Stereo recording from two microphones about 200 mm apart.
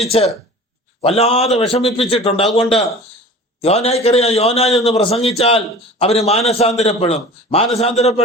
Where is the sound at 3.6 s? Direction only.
30° left (ahead or behind).